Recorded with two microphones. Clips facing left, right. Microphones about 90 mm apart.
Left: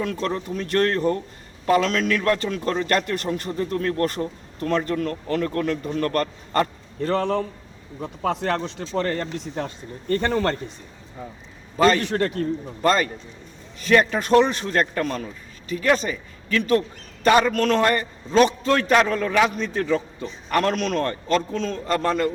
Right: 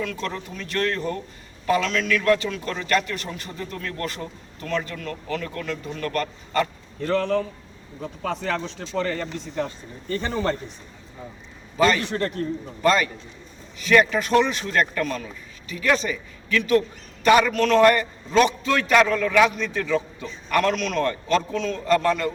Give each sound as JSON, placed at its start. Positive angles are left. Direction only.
{"t": 0.0, "sound": "a man's voice", "side_deg": 35}
{"t": 8.2, "sound": "speech", "side_deg": 65}
{"t": 8.9, "sound": "speech", "side_deg": 55}
{"t": 12.0, "sound": "a man's voice", "side_deg": 65}
{"t": 12.8, "sound": "a man's voice", "side_deg": 35}